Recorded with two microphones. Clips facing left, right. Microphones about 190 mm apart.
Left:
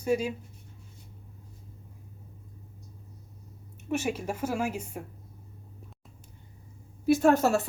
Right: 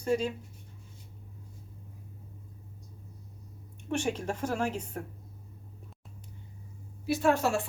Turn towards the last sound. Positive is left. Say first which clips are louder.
# left 4 dB
turn(degrees=40)  # may be behind; listen again after turning